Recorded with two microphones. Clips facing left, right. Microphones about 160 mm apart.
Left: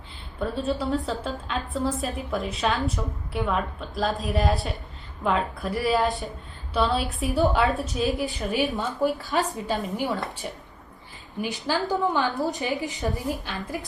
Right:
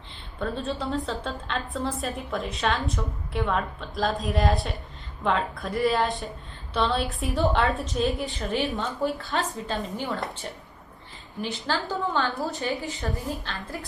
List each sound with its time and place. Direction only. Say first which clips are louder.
0.3 s a woman's voice: left 3 dB; centre (ahead or behind)